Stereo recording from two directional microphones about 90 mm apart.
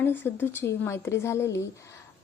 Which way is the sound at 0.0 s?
25° left (ahead or behind).